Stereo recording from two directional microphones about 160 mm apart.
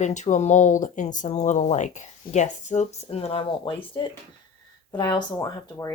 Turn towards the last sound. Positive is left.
turn(degrees=20)  # may be behind; listen again after turning